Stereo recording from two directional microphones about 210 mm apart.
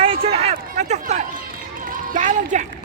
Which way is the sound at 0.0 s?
25° right (ahead or behind).